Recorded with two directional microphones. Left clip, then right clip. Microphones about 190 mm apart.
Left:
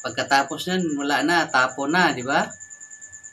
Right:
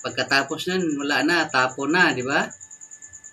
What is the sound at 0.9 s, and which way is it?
Speech, 20° left (ahead or behind).